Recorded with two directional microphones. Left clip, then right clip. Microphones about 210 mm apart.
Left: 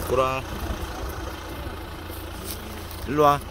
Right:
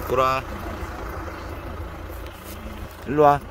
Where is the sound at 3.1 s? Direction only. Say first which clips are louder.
Right 3 dB; 20° right (ahead or behind).